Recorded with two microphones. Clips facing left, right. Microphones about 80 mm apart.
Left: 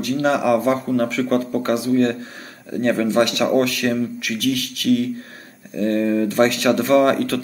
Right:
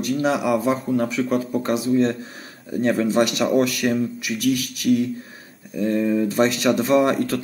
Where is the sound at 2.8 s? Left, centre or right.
Centre.